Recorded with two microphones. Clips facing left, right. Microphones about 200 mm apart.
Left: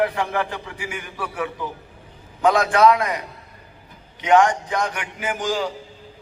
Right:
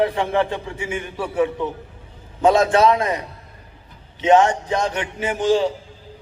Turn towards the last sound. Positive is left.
turn(degrees=-25)  # may be behind; listen again after turning